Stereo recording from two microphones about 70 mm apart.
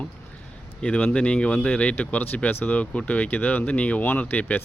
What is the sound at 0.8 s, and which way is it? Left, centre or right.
Speech, centre.